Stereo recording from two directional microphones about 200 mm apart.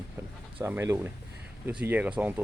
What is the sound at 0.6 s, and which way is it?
Speech, 10° right (ahead or behind).